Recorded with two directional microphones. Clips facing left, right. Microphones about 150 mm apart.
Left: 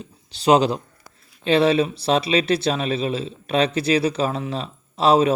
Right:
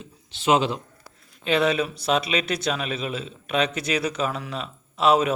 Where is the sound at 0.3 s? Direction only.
35° left (ahead or behind).